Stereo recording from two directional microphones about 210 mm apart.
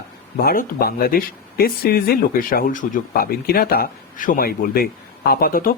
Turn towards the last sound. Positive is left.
turn(degrees=45)  # may be behind; listen again after turning